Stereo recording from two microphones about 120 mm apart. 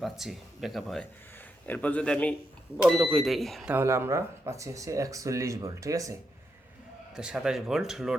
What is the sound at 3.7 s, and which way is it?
Speech, 20° right (ahead or behind).